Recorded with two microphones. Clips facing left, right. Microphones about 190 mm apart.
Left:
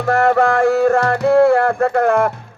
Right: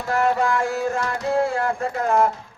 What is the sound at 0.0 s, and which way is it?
Music, 60° left (ahead or behind).